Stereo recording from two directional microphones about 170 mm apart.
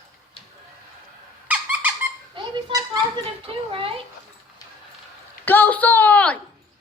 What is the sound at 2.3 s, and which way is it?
Speech, 25° right (ahead or behind).